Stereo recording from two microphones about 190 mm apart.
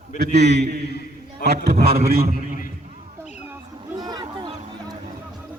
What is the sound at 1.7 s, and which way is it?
Speech, 30° right (ahead or behind).